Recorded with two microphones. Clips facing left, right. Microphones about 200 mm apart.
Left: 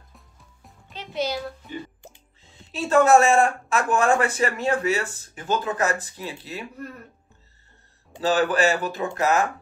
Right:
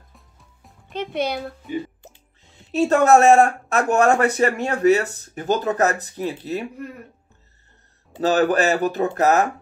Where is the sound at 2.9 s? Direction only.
40° right (ahead or behind).